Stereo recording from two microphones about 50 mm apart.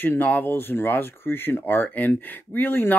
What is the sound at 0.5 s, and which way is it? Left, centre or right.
Speech, left.